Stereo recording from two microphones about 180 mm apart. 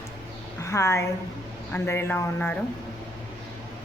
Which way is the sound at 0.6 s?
15° left (ahead or behind).